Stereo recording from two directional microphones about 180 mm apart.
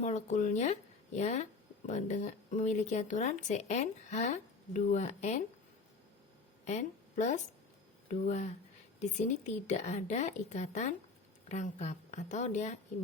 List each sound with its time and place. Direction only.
0.0 s speech: 40° left (ahead or behind)
6.7 s a woman's voice: 40° left (ahead or behind)